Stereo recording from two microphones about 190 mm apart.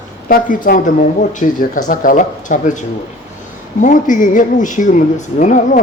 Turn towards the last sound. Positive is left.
turn(degrees=40)  # may be behind; listen again after turning